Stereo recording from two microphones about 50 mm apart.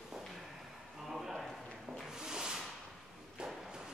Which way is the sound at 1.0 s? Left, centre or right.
Centre.